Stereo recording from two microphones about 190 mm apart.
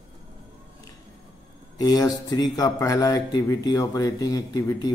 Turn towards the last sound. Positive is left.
turn(degrees=20)  # may be behind; listen again after turning